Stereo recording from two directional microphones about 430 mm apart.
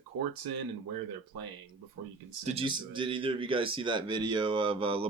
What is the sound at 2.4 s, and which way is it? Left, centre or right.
Speech, centre.